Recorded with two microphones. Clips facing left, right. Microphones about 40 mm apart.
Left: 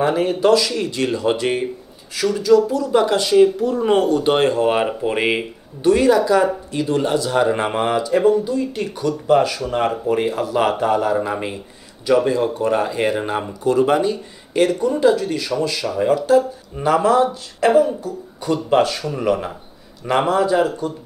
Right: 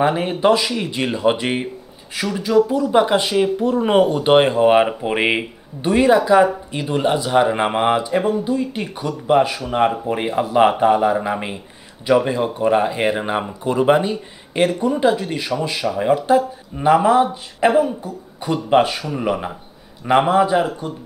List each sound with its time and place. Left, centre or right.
0.0 s speech: right